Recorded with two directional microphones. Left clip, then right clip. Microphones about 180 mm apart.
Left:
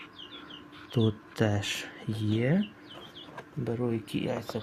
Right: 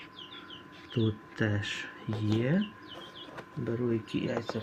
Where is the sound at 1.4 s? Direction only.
70° left (ahead or behind).